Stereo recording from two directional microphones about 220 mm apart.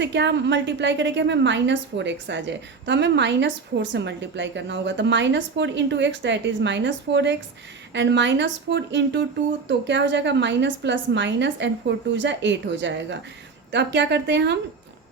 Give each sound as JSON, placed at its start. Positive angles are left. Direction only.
{"t": 0.0, "sound": "a woman's voice", "side_deg": -50}